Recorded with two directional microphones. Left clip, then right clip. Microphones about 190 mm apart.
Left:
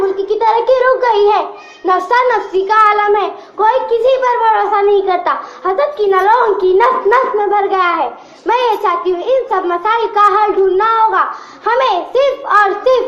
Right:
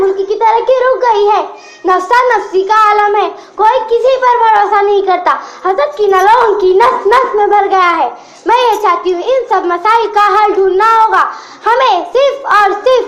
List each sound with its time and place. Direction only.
0.3 s a child's voice: 40° right (ahead or behind)